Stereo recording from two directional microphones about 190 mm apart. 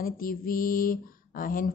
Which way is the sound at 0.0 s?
50° left (ahead or behind).